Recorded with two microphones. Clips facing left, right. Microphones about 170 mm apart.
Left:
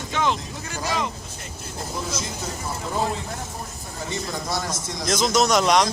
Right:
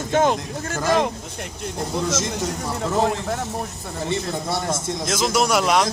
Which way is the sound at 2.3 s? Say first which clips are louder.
Right 5 dB; 70° right (ahead or behind).